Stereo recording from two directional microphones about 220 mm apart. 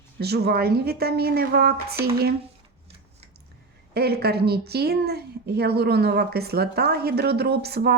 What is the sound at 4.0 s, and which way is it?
A woman's voice, 45° right (ahead or behind).